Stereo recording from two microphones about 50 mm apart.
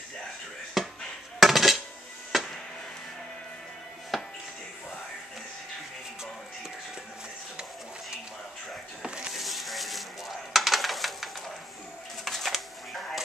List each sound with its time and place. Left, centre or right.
0.8 s chop: centre
1.4 s dishes: centre
2.3 s music: centre
4.1 s music: centre
9.0 s a sound: centre
9.3 s a sound: centre